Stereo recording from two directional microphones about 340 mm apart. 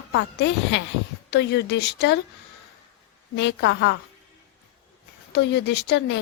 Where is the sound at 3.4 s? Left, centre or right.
Left.